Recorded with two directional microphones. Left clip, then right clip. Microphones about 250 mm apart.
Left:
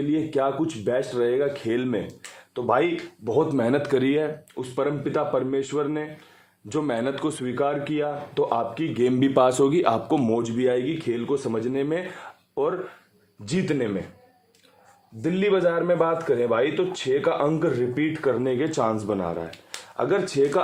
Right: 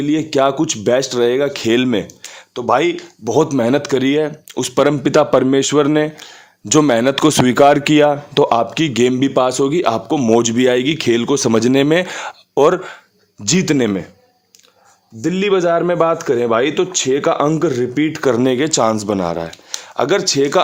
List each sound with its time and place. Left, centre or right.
0.1 s a man's voice: right
4.5 s a man's voice: right
9.1 s a man's voice: centre
10.3 s a man's voice: right
15.2 s a man's voice: right